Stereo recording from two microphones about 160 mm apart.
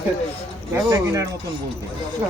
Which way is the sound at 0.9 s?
20° right (ahead or behind).